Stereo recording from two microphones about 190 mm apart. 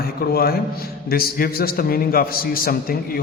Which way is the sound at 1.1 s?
50° left (ahead or behind).